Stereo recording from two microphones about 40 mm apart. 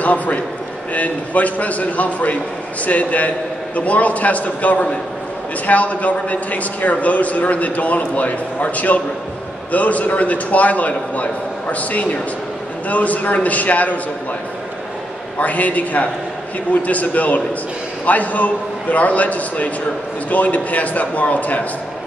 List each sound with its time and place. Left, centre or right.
0.0 s a man's voice: left
15.3 s a man's voice: left